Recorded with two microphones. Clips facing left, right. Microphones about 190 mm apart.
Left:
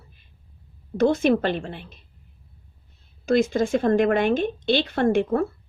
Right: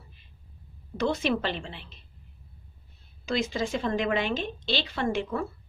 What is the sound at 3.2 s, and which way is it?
A woman's voice, 50° left (ahead or behind).